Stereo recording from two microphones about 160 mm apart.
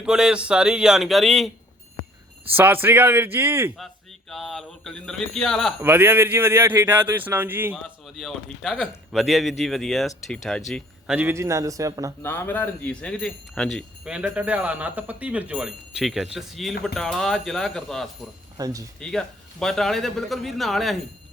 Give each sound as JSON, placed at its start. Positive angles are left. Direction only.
{"t": 0.0, "sound": "speech", "side_deg": -5}
{"t": 2.6, "sound": "speech", "side_deg": -15}
{"t": 4.3, "sound": "speech", "side_deg": 0}
{"t": 5.8, "sound": "speech", "side_deg": -15}
{"t": 8.0, "sound": "speech", "side_deg": 0}
{"t": 12.2, "sound": "speech", "side_deg": 15}
{"t": 18.5, "sound": "speech", "side_deg": -20}
{"t": 18.9, "sound": "speech", "side_deg": 5}